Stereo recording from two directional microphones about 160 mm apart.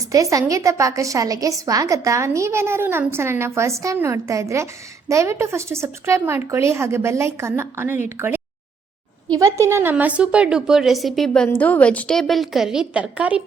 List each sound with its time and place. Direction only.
0.1 s a woman's voice: 20° right (ahead or behind)
9.4 s a woman's voice: 20° right (ahead or behind)